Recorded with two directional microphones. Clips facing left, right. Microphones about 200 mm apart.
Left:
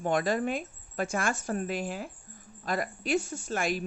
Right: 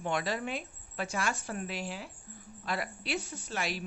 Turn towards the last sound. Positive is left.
turn(degrees=50)  # may be behind; listen again after turning